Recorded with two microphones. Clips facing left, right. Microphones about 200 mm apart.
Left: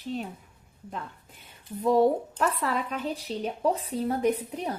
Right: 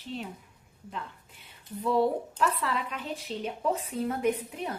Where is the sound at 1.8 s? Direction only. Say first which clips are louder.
Left 4 dB; 45° left (ahead or behind).